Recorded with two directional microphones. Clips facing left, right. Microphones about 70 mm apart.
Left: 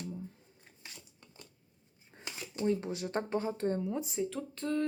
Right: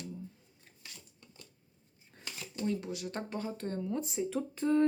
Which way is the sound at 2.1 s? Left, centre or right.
Left.